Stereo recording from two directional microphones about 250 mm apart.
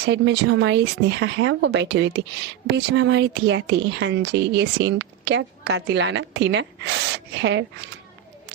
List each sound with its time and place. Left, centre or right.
0.0 s speech: right